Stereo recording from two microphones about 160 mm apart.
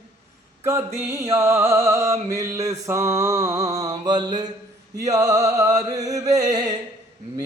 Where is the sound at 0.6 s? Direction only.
15° right (ahead or behind).